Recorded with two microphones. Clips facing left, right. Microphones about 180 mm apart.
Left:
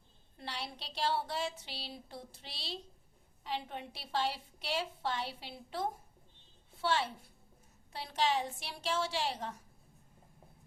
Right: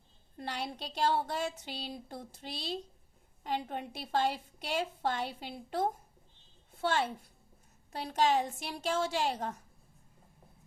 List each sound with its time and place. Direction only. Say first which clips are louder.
0.3 s a woman's voice: right 5 dB; 50° right (ahead or behind)